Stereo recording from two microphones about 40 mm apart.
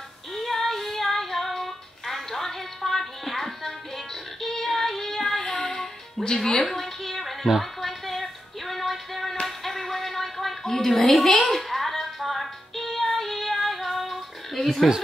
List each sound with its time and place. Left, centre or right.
0.3 s female singing: centre
5.4 s child singing: centre
5.7 s music: centre
6.2 s speech: centre
6.7 s music: centre
13.7 s a sound: centre